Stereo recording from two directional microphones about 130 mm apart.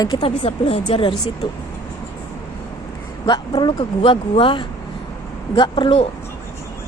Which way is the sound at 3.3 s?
35° left (ahead or behind).